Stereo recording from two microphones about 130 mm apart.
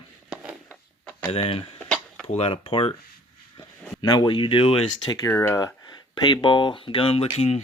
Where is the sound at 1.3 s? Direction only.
50° left (ahead or behind).